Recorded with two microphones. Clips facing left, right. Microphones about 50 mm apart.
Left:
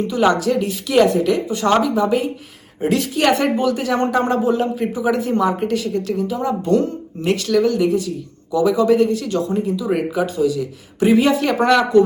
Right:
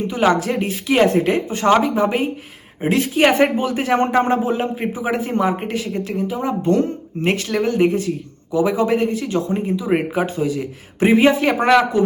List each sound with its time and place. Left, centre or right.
0.1 s a woman's voice: right